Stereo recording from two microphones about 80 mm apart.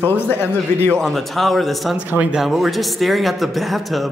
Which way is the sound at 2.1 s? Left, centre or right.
Centre.